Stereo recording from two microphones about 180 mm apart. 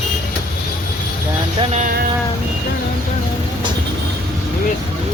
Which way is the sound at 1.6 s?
40° right (ahead or behind).